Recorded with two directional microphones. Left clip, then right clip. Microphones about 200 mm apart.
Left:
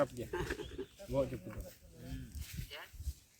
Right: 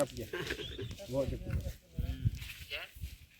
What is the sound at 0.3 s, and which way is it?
Speech, 30° left (ahead or behind).